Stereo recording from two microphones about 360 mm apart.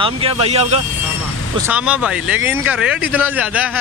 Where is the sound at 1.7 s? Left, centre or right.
Centre.